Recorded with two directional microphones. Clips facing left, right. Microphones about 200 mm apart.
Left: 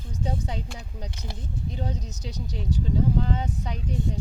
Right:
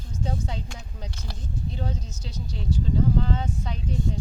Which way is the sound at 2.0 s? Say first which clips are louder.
Left 2 dB; 40° left (ahead or behind).